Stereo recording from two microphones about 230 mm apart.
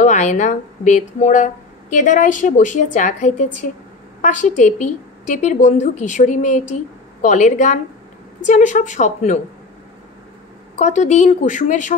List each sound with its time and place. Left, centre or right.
0.0 s a woman's voice: left
10.8 s speech: left